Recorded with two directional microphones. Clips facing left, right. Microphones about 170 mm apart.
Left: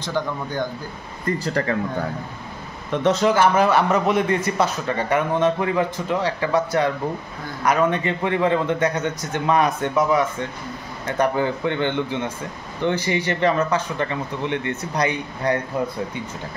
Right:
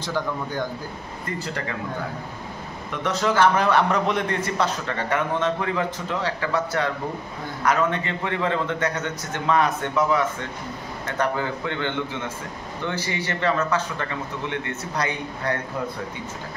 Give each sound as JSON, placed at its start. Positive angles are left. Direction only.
{"t": 0.0, "sound": "a man's voice", "side_deg": -5}
{"t": 1.4, "sound": "speech", "side_deg": 40}
{"t": 2.9, "sound": "speech", "side_deg": 20}
{"t": 3.3, "sound": "a man's voice", "side_deg": 5}